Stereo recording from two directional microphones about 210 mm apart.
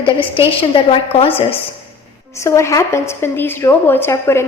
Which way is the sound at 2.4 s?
15° left (ahead or behind).